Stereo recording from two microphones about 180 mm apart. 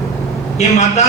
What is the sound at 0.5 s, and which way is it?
Speech, 40° left (ahead or behind).